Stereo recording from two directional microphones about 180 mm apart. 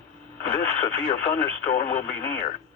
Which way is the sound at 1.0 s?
45° left (ahead or behind).